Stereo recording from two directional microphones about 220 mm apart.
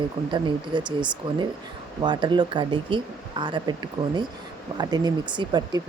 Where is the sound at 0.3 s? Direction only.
20° right (ahead or behind).